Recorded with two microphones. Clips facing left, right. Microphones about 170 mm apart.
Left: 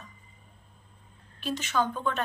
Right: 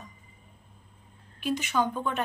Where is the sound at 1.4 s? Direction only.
15° right (ahead or behind).